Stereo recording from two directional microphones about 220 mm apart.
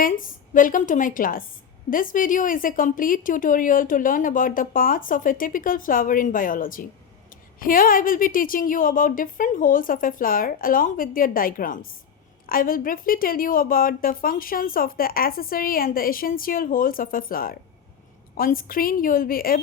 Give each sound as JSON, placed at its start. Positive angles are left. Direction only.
{"t": 0.0, "sound": "a woman's voice", "side_deg": 40}